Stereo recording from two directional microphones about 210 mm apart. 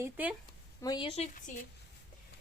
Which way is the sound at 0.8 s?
20° left (ahead or behind).